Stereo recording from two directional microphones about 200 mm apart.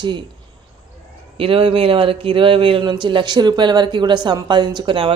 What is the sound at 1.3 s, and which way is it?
A man's voice, 25° right (ahead or behind).